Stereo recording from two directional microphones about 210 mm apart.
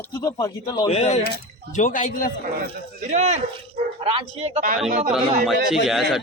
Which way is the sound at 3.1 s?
30° right (ahead or behind).